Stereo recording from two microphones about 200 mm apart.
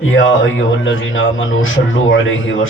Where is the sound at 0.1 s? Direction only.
75° left (ahead or behind).